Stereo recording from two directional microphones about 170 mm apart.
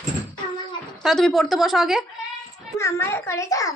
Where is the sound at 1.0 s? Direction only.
Centre (ahead or behind).